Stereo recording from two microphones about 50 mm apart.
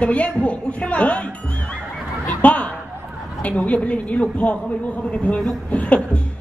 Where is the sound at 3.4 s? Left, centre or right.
Left.